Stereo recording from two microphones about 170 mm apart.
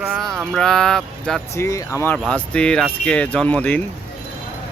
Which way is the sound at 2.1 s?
5° left (ahead or behind).